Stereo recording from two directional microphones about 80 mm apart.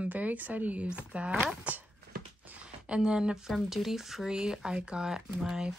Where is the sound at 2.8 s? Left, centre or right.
Centre.